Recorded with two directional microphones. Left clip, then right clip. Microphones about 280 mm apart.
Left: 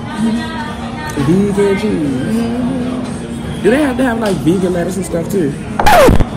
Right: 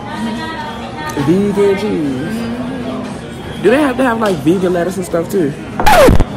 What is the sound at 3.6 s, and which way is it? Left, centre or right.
Speech, centre.